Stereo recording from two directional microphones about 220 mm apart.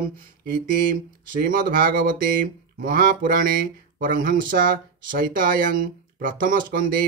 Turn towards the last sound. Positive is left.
turn(degrees=-40)  # may be behind; listen again after turning